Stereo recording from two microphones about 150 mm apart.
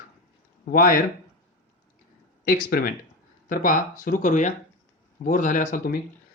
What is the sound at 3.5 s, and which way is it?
Speech, 65° left (ahead or behind).